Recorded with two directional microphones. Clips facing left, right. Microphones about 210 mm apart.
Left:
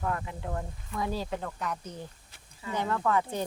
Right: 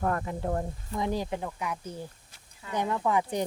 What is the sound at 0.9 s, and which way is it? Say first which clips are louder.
Speech: right 2 dB; 20° right (ahead or behind).